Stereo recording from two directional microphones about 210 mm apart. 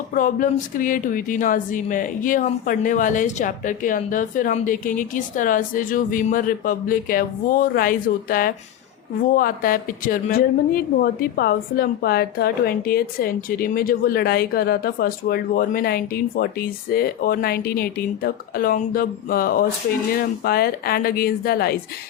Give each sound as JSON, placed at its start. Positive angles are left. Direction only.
{"t": 0.1, "sound": "a woman's voice", "side_deg": 40}